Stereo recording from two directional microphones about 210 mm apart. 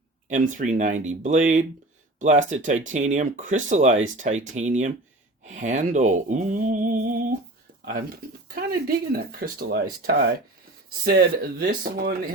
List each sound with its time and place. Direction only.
0.3 s speech: 35° right (ahead or behind)